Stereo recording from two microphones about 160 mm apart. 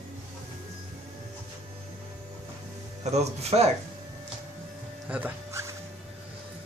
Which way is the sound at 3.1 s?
40° right (ahead or behind).